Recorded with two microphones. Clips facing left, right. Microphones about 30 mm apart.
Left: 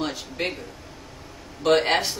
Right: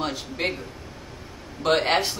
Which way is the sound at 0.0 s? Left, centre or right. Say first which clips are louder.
Right 1 dB; centre.